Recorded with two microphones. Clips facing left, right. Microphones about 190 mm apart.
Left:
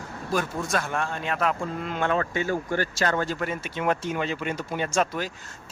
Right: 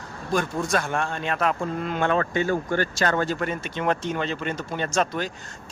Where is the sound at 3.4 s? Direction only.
5° left (ahead or behind).